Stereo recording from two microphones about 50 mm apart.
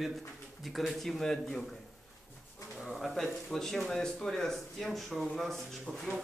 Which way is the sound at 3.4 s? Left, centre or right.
Centre.